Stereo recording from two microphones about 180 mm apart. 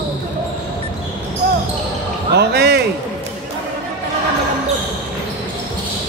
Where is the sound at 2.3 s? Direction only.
65° right (ahead or behind).